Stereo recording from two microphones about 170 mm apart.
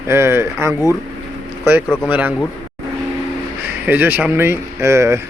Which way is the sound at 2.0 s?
10° right (ahead or behind).